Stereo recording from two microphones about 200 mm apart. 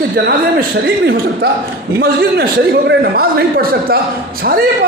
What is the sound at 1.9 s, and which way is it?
A man's voice, 55° right (ahead or behind).